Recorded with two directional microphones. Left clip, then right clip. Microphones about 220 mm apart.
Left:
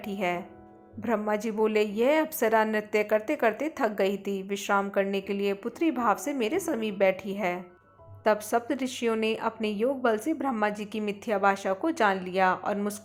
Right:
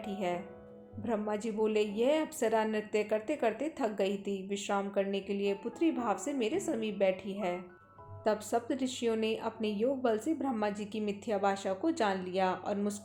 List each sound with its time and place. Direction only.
0.0 s a woman's voice: 20° left (ahead or behind)